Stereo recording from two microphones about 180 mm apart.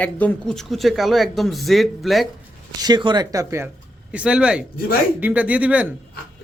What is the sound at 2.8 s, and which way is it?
A man's voice, 25° right (ahead or behind).